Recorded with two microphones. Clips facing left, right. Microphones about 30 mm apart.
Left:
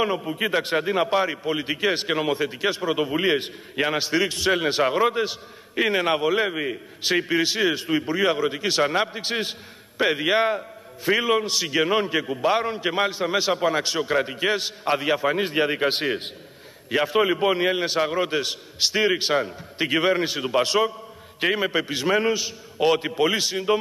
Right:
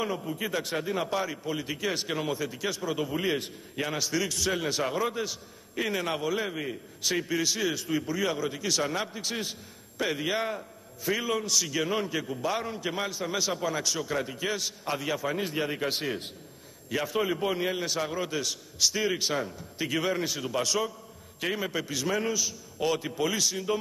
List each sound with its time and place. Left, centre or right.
0.0 s a man's voice: left